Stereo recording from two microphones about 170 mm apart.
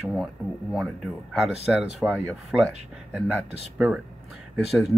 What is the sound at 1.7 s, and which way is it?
Speech, 5° right (ahead or behind).